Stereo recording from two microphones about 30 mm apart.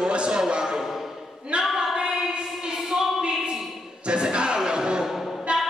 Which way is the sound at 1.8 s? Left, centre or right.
Right.